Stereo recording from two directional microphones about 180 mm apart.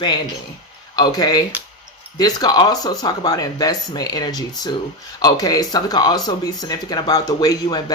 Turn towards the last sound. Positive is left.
turn(degrees=20)  # may be behind; listen again after turning